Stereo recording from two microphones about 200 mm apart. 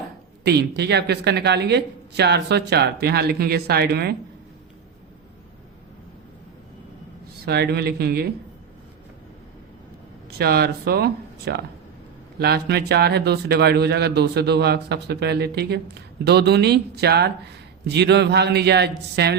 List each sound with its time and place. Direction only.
0.4 s a man's voice: 55° right (ahead or behind)
7.4 s speech: 55° right (ahead or behind)
10.2 s a man's voice: 55° right (ahead or behind)